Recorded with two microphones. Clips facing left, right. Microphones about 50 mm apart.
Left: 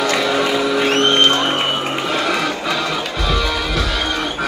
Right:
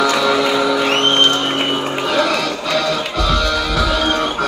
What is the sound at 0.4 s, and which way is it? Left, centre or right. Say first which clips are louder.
Music: right 1 dB; centre.